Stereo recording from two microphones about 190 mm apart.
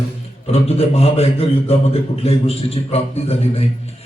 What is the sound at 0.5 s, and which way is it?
A man's voice, 30° left (ahead or behind).